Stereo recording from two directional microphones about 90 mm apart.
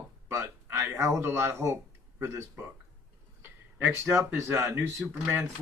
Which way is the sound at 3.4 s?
25° right (ahead or behind).